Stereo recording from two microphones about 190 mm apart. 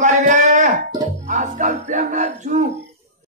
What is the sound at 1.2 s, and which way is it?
Music, 40° right (ahead or behind).